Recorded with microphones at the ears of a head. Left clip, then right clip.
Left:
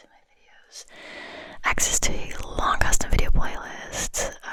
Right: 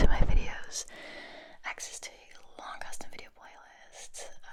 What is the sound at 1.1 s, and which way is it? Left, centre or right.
Whispering, left.